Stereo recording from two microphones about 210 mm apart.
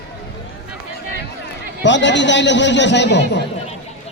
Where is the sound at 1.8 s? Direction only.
60° left (ahead or behind).